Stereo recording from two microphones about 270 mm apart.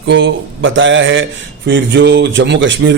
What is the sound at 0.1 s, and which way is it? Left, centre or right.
A man's voice, right.